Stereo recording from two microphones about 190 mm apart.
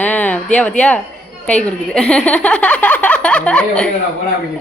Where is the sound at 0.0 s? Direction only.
10° left (ahead or behind).